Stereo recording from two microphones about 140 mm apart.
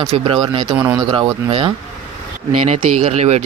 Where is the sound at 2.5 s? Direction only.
50° right (ahead or behind).